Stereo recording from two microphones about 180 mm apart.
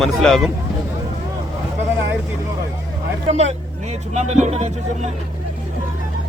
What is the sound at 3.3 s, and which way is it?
Vehicle, 40° right (ahead or behind).